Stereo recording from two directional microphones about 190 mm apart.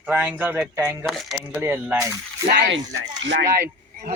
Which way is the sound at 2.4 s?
65° right (ahead or behind).